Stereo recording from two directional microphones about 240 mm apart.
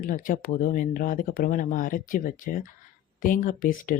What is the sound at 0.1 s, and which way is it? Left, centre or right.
Speech, left.